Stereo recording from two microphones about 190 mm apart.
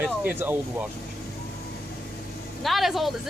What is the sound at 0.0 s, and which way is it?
Speech, 10° right (ahead or behind).